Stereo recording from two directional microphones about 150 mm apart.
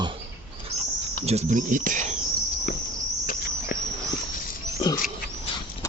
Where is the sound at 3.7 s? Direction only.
65° left (ahead or behind).